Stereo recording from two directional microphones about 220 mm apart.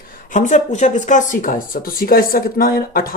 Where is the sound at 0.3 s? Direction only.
35° left (ahead or behind).